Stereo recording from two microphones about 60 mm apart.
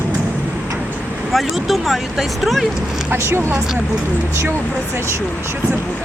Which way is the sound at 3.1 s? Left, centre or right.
Right.